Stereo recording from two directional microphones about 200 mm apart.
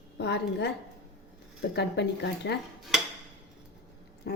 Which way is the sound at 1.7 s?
55° left (ahead or behind).